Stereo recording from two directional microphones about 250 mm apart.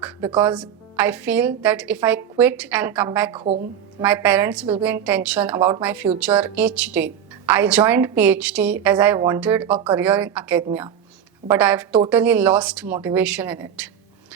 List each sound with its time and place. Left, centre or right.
0.3 s a woman's voice: centre
3.3 s speech: right
4.0 s a woman's voice: centre